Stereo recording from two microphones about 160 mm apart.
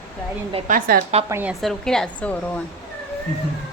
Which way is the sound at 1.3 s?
10° right (ahead or behind).